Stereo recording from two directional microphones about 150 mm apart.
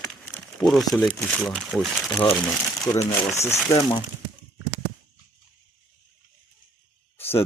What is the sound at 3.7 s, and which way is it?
Speech, 25° left (ahead or behind).